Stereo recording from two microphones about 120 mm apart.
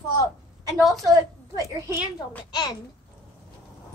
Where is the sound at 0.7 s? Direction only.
Centre (ahead or behind).